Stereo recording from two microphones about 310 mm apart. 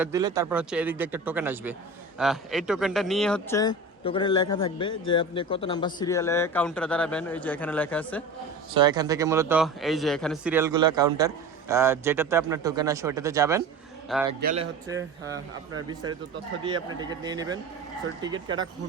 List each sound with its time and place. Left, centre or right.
0.0 s speech: centre
8.7 s a man's voice: centre
14.4 s a man's voice: centre
16.6 s a man's voice: centre